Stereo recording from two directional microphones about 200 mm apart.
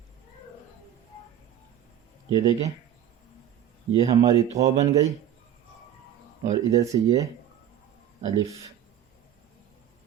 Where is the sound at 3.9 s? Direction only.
15° right (ahead or behind).